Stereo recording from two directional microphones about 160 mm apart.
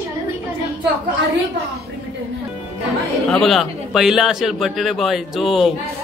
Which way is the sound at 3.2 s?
Centre (ahead or behind).